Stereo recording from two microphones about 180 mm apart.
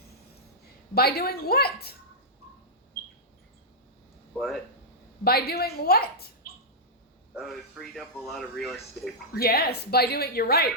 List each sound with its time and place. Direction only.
0.9 s speech: 60° left (ahead or behind)
4.4 s speech: centre (ahead or behind)
5.2 s speech: 60° left (ahead or behind)
7.3 s speech: centre (ahead or behind)
9.3 s speech: 60° left (ahead or behind)